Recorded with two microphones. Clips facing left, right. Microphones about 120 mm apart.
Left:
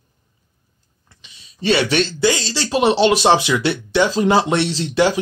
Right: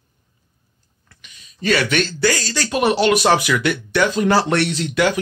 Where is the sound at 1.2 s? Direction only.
25° left (ahead or behind).